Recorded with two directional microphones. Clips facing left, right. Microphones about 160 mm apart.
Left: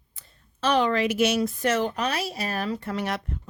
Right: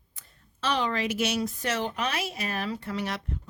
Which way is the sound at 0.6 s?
55° left (ahead or behind).